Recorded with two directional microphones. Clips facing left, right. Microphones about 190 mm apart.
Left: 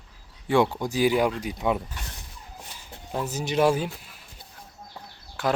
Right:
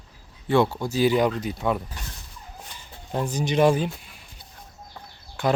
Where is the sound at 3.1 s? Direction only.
5° left (ahead or behind).